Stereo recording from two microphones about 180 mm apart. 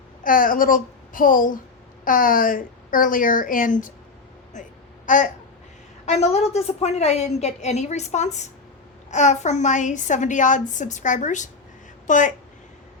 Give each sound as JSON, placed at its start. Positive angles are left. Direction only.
{"t": 0.2, "sound": "a woman's voice", "side_deg": 50}
{"t": 5.0, "sound": "babbling", "side_deg": 45}
{"t": 6.1, "sound": "a woman's voice", "side_deg": 35}